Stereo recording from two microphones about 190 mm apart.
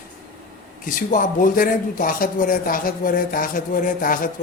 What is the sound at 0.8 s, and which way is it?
Speech, 45° left (ahead or behind).